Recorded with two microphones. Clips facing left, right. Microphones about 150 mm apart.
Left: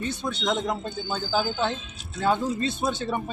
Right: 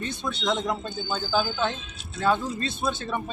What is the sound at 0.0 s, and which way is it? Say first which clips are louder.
Speech: left 2 dB; 15° left (ahead or behind).